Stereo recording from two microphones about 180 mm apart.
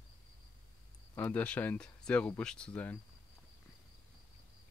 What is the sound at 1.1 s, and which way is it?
Speech, 10° left (ahead or behind).